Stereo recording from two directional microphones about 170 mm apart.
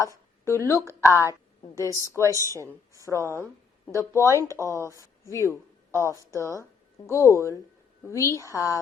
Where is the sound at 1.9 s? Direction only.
15° left (ahead or behind).